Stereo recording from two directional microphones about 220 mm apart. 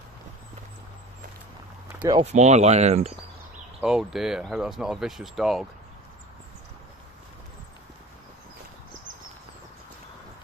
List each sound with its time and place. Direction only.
1.9 s a sound: 10° right (ahead or behind)
2.1 s speech: 30° right (ahead or behind)
3.8 s speech: 5° right (ahead or behind)